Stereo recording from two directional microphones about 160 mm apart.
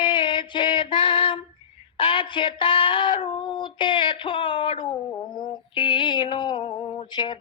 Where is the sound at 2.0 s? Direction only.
30° left (ahead or behind).